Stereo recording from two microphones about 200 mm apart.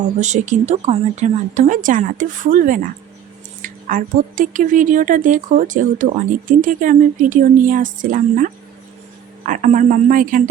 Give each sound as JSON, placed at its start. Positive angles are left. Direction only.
{"t": 0.2, "sound": "speech", "side_deg": -35}